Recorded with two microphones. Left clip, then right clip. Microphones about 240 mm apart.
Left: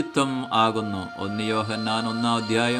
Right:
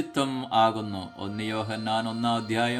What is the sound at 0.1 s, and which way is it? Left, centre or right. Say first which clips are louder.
Speech: left 2 dB; centre.